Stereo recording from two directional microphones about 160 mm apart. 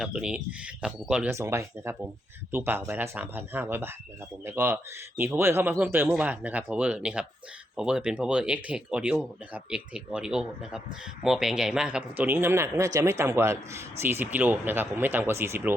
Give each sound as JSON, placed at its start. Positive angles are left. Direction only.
{"t": 0.0, "sound": "a man's voice", "side_deg": -5}